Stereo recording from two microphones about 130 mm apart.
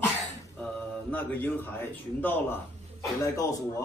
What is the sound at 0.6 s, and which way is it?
Speech, 10° left (ahead or behind).